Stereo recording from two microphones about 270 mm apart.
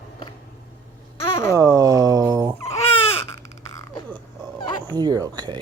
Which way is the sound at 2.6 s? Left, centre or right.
Left.